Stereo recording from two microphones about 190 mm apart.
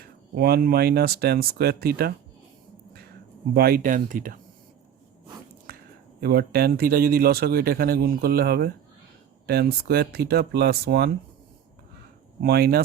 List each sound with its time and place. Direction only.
0.0 s a man's voice: 55° right (ahead or behind)
3.5 s speech: 55° right (ahead or behind)
6.1 s a man's voice: 55° right (ahead or behind)
12.4 s a man's voice: 55° right (ahead or behind)